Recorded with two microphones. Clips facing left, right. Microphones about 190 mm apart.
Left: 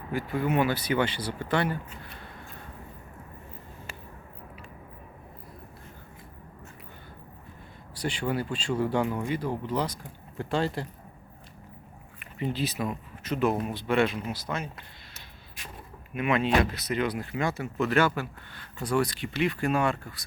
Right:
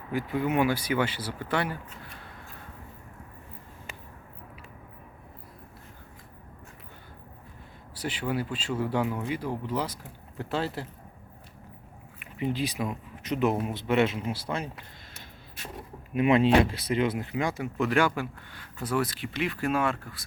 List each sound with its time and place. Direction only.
0.1 s speech: 15° right (ahead or behind)
7.9 s speech: 5° right (ahead or behind)
12.2 s speech: 10° right (ahead or behind); by 14.7 s 30° right (ahead or behind)
16.1 s speech: 30° right (ahead or behind); by 20.2 s centre (ahead or behind)